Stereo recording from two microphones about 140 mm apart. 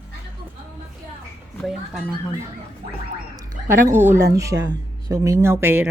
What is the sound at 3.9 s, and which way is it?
Speech, 15° right (ahead or behind).